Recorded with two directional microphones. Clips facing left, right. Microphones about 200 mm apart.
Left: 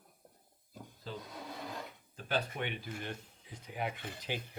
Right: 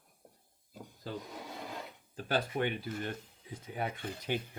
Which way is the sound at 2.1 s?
40° right (ahead or behind).